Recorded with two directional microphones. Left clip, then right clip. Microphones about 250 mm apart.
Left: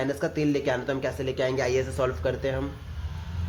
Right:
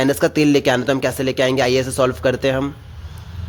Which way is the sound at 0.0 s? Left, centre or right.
Right.